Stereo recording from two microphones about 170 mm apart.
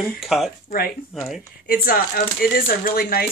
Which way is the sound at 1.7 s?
60° left (ahead or behind).